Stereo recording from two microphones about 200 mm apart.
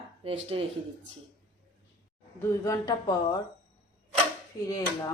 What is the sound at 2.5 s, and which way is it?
Speech, 15° left (ahead or behind).